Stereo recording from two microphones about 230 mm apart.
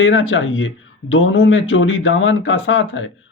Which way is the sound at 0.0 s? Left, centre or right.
Left.